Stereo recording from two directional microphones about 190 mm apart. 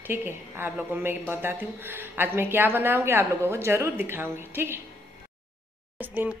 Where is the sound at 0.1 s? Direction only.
10° right (ahead or behind).